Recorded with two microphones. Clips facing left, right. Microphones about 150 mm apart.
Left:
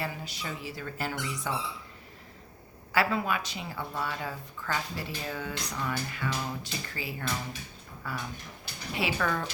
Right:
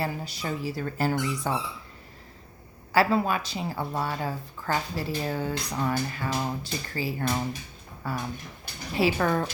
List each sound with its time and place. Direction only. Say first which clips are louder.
0.0 s speech: right 5 dB; 35° right (ahead or behind)
2.9 s speech: right 5 dB; 35° right (ahead or behind)